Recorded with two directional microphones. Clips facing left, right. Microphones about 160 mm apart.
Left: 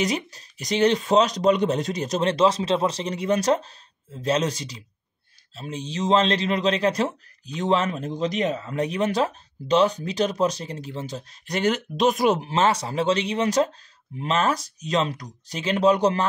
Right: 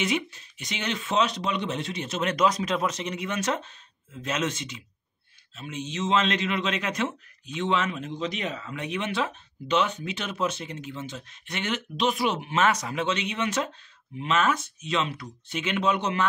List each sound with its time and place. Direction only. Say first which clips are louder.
0.0 s a man's voice: left 2 dB; 40° left (ahead or behind)